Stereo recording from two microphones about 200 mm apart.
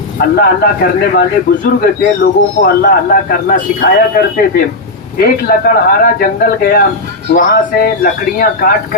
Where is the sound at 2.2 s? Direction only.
50° left (ahead or behind).